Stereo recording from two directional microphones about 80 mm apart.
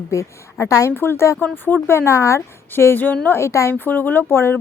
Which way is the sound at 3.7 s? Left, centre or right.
Left.